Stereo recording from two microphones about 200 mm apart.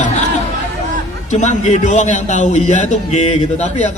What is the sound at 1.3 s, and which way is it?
Speech, 35° left (ahead or behind).